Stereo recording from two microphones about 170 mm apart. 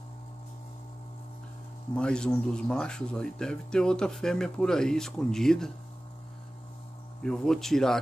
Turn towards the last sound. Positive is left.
turn(degrees=5)  # may be behind; listen again after turning